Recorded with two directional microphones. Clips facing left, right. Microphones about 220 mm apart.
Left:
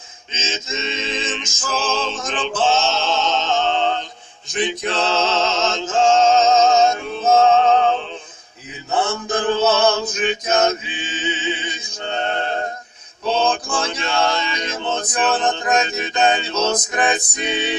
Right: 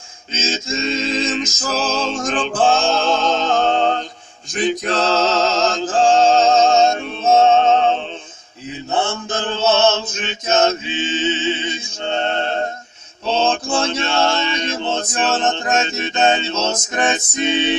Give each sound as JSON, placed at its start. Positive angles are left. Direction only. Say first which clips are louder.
{"t": 0.5, "sound": "music", "louder": "right 4 dB", "side_deg": -35}
{"t": 8.9, "sound": "mantra", "louder": "left 1 dB", "side_deg": -25}
{"t": 13.3, "sound": "male singing", "louder": "right 2 dB", "side_deg": -25}